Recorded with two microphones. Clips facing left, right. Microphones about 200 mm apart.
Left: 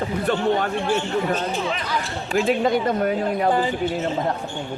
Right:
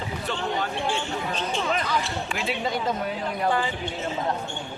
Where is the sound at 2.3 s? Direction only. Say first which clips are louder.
Left 11 dB; 45° left (ahead or behind).